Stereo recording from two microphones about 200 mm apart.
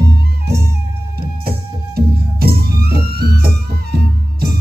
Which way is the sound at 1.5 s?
50° right (ahead or behind).